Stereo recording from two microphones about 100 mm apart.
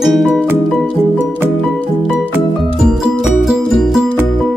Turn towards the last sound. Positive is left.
turn(degrees=-5)  # may be behind; listen again after turning